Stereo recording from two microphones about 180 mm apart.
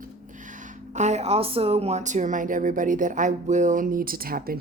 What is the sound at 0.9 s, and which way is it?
Speech, 40° right (ahead or behind).